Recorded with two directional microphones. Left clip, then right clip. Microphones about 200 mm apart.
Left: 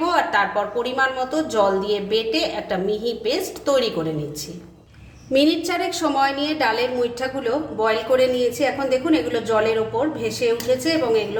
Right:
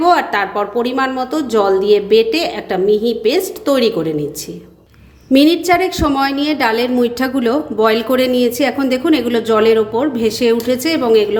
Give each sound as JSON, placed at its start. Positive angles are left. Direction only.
{"t": 0.0, "sound": "a woman's voice", "side_deg": -35}
{"t": 5.3, "sound": "a woman's voice", "side_deg": -35}